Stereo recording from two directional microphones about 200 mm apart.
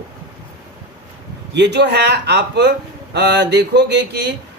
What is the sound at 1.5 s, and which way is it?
Speech, 60° right (ahead or behind).